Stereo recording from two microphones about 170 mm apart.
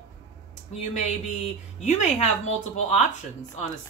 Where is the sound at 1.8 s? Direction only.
40° left (ahead or behind).